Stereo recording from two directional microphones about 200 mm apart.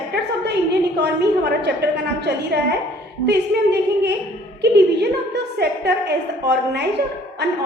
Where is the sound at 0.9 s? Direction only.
55° right (ahead or behind).